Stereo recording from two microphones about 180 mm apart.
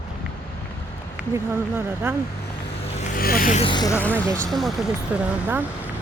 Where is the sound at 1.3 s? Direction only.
15° right (ahead or behind).